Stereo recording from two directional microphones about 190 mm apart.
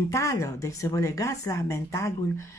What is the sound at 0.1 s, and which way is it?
Speech, 15° left (ahead or behind).